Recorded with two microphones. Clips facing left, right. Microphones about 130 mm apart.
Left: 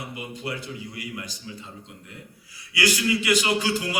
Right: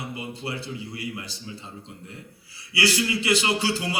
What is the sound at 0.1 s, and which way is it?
A man's voice, 30° right (ahead or behind).